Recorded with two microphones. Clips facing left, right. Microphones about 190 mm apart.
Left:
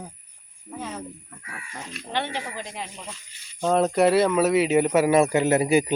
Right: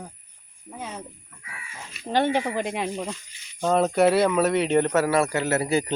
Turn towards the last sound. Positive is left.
turn(degrees=10)  # may be behind; listen again after turning